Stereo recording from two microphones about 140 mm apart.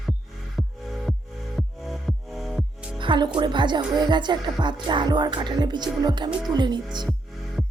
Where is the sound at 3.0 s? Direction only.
35° right (ahead or behind).